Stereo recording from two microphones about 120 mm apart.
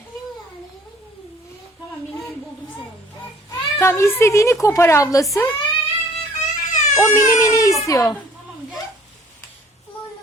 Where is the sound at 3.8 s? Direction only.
20° left (ahead or behind).